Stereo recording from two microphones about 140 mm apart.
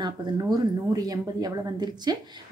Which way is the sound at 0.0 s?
30° right (ahead or behind).